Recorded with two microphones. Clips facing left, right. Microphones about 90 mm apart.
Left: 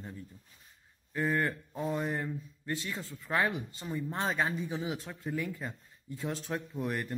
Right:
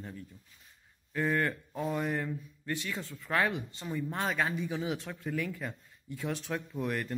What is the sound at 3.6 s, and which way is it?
Speech, 20° right (ahead or behind).